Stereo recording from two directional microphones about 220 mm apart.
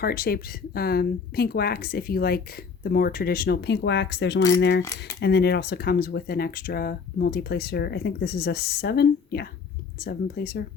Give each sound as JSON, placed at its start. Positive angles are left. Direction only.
{"t": 0.0, "sound": "speech", "side_deg": 40}